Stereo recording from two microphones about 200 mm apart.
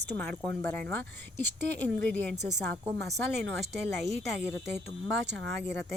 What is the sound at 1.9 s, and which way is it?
Speech, 60° right (ahead or behind).